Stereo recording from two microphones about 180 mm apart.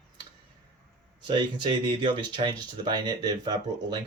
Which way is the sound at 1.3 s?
25° right (ahead or behind).